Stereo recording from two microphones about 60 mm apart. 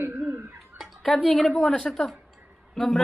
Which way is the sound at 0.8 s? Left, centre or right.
Centre.